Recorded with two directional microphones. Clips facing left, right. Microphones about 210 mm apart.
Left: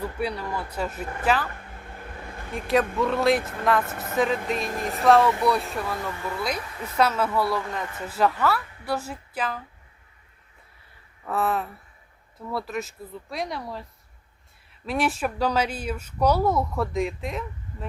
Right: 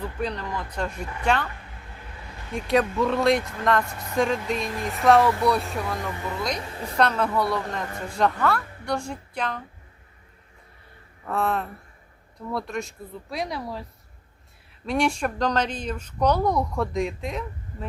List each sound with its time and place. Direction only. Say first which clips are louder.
0.0 s speech: left 1 dB; 10° left (ahead or behind)
2.5 s speech: right 1 dB; centre (ahead or behind)
6.1 s speech: even; 20° right (ahead or behind)
6.9 s speech: even; 5° left (ahead or behind)
11.3 s speech: even; 5° left (ahead or behind)